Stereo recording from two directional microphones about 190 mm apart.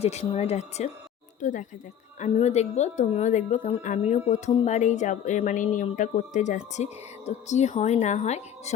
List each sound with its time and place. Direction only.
0.0 s a woman's voice: 35° left (ahead or behind)